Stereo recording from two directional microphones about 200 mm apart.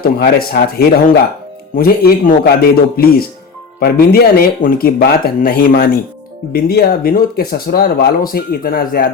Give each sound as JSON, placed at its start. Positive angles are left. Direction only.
{"t": 0.0, "sound": "speech", "side_deg": 50}